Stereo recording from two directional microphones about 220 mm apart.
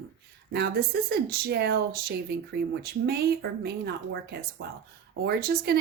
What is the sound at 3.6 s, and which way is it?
A woman's voice, 45° right (ahead or behind).